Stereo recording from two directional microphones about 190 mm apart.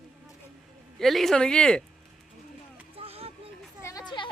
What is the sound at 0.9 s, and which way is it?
Speech, centre (ahead or behind).